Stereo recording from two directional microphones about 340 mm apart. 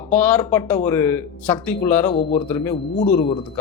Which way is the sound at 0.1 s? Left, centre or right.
Centre.